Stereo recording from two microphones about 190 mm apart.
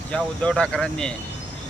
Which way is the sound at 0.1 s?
5° left (ahead or behind).